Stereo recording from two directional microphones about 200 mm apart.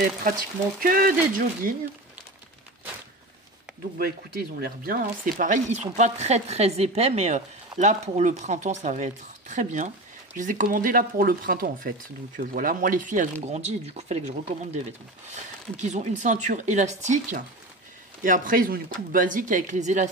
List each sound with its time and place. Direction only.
0.7 s speech: 45° right (ahead or behind)
4.0 s speech: 50° right (ahead or behind)